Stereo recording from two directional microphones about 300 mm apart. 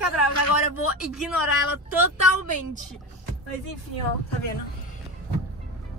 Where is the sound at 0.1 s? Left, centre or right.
Left.